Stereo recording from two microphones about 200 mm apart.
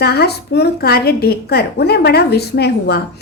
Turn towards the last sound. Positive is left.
turn(degrees=55)  # may be behind; listen again after turning